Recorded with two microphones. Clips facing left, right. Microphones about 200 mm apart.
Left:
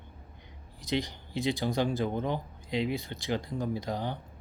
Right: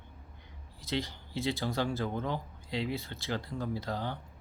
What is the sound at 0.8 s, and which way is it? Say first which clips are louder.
Speech: left 3 dB; 15° left (ahead or behind).